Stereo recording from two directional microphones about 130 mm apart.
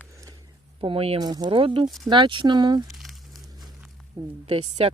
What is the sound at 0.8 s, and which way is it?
Speech, 45° right (ahead or behind).